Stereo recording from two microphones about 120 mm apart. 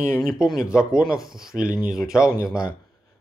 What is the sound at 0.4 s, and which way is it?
Speech, 5° right (ahead or behind).